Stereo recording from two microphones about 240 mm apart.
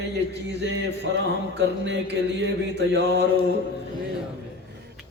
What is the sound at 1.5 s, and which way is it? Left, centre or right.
A man's voice, right.